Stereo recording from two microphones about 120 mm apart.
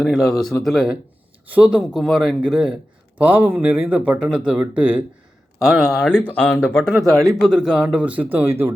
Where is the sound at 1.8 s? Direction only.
Centre (ahead or behind).